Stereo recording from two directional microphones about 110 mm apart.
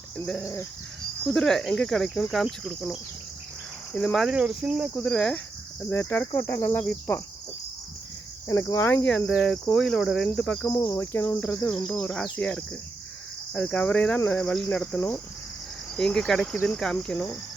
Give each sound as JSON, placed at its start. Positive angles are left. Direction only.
{"t": 1.2, "sound": "insect", "side_deg": 10}
{"t": 4.4, "sound": "cricket", "side_deg": -10}
{"t": 4.9, "sound": "cricket", "side_deg": 10}
{"t": 5.9, "sound": "insect", "side_deg": 20}
{"t": 8.4, "sound": "insect", "side_deg": 30}
{"t": 9.0, "sound": "cricket", "side_deg": 5}
{"t": 9.3, "sound": "insect", "side_deg": 5}
{"t": 10.3, "sound": "cricket", "side_deg": 10}
{"t": 10.7, "sound": "cricket", "side_deg": 30}
{"t": 10.9, "sound": "insect", "side_deg": 20}
{"t": 11.9, "sound": "cricket", "side_deg": 10}
{"t": 16.0, "sound": "insect", "side_deg": 5}
{"t": 16.6, "sound": "cricket", "side_deg": 5}